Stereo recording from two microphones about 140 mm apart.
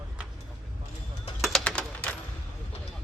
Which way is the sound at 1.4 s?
5° left (ahead or behind).